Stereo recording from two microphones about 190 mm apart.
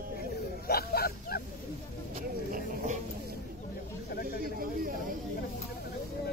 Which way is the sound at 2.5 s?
45° right (ahead or behind).